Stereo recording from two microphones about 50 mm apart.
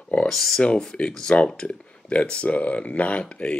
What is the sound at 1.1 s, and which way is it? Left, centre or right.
Speech, centre.